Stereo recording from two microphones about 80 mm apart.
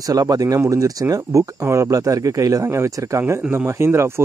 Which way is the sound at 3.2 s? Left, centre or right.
Right.